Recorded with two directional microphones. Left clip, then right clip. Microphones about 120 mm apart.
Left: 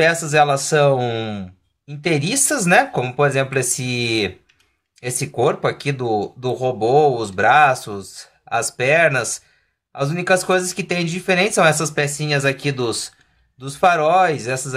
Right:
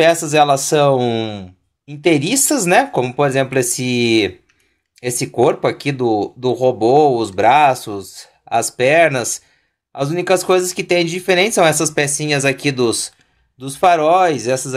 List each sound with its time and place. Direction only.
0.0 s speech: 35° right (ahead or behind)